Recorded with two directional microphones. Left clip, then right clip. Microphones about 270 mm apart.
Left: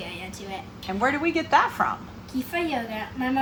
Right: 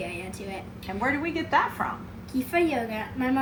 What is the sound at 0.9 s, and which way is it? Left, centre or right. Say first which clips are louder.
A woman's voice: left 4 dB; left.